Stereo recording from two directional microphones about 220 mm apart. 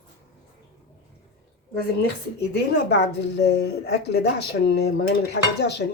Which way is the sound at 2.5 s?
50° left (ahead or behind).